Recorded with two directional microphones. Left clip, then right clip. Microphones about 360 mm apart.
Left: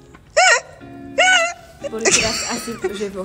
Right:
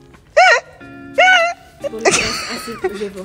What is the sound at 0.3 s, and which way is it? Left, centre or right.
Music, centre.